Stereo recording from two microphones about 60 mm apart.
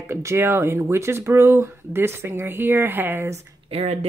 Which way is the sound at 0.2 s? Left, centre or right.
Right.